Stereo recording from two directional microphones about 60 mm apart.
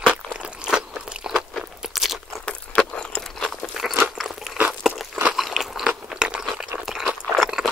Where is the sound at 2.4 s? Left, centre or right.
Centre.